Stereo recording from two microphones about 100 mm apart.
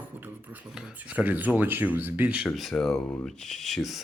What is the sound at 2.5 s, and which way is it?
Speech, 5° left (ahead or behind).